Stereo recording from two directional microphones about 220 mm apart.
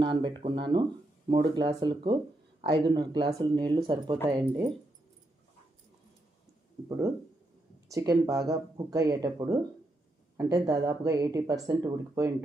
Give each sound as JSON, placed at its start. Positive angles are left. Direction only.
{"t": 0.0, "sound": "speech", "side_deg": -20}
{"t": 7.9, "sound": "speech", "side_deg": -15}